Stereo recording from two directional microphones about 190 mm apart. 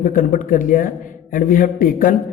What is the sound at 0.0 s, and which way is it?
Music, 45° left (ahead or behind).